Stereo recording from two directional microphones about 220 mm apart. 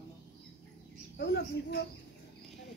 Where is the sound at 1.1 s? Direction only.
50° left (ahead or behind).